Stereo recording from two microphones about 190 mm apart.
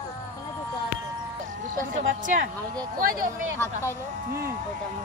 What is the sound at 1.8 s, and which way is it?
Speech, 45° right (ahead or behind).